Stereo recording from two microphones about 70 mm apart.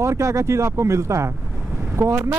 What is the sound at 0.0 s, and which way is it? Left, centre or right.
Speech, right.